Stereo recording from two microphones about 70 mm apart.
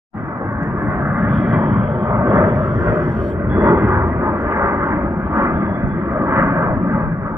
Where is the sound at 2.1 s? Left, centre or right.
Right.